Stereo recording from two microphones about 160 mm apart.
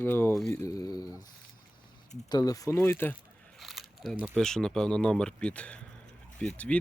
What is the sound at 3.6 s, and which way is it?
Speech, centre (ahead or behind).